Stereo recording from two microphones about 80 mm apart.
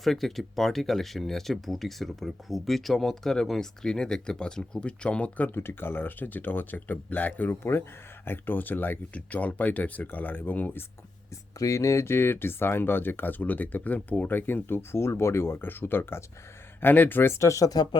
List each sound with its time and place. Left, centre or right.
0.0 s speech: centre
5.5 s speech: left
11.6 s speech: left